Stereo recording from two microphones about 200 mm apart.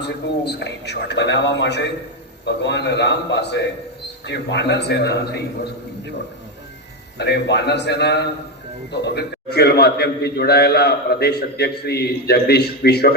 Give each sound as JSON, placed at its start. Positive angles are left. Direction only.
{"t": 0.0, "sound": "a man's voice", "side_deg": 60}
{"t": 7.2, "sound": "a man's voice", "side_deg": 55}